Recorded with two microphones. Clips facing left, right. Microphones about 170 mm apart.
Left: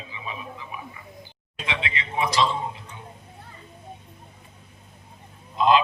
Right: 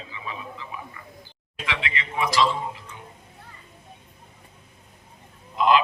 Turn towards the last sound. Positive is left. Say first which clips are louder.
# left 1 dB
turn(degrees=25)  # may be behind; listen again after turning